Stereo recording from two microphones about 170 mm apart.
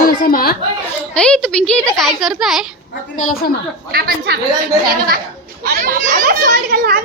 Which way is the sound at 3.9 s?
65° right (ahead or behind).